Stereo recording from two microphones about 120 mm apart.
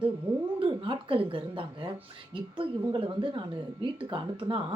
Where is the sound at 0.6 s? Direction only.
45° right (ahead or behind).